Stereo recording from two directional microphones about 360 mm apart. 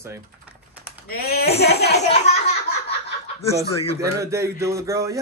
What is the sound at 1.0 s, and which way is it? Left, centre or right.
Speech, left.